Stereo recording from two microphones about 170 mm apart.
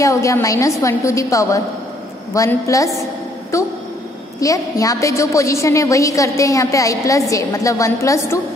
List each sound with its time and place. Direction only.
0.0 s a woman's voice: 20° left (ahead or behind)